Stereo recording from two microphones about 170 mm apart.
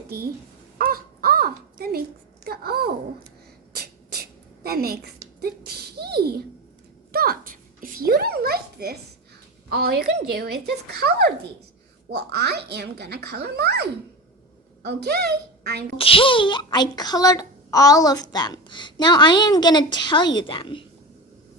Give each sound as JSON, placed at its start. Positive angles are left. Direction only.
{"t": 0.8, "sound": "a sound", "side_deg": -60}
{"t": 9.6, "sound": "a woman's voice", "side_deg": -65}
{"t": 16.0, "sound": "speech", "side_deg": 30}